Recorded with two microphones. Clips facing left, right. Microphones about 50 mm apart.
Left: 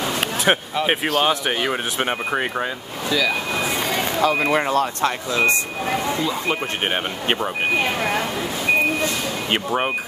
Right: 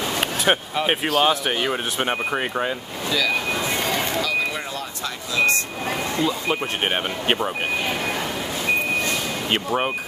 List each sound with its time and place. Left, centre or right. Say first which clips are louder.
0.2 s speech: left 1 dB; centre
3.1 s a sound: left 1 dB; centre
4.2 s speech: left 6 dB; left
5.3 s speech: right 1 dB; left
6.5 s speech: even; centre
9.5 s speech: left 1 dB; centre